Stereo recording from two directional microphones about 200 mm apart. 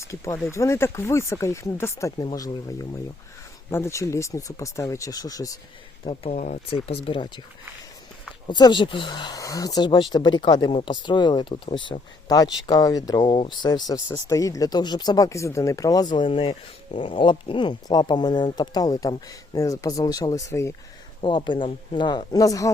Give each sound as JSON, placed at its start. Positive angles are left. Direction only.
{"t": 0.0, "sound": "speech", "side_deg": 15}
{"t": 6.1, "sound": "speech", "side_deg": 35}
{"t": 6.8, "sound": "speech", "side_deg": 30}
{"t": 8.4, "sound": "speech", "side_deg": 20}
{"t": 21.2, "sound": "speech", "side_deg": 25}